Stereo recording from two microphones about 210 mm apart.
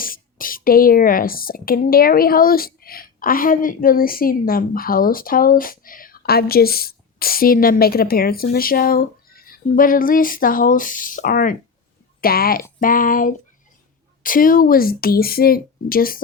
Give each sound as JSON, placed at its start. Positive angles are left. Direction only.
{"t": 0.0, "sound": "speech", "side_deg": 40}